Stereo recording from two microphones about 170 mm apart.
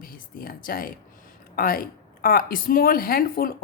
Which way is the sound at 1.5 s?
55° left (ahead or behind).